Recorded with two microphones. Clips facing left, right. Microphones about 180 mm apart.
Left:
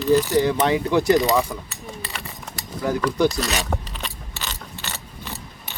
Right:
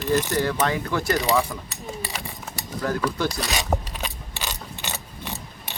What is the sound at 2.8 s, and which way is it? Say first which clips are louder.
Mechanisms: left 3 dB; 15° left (ahead or behind).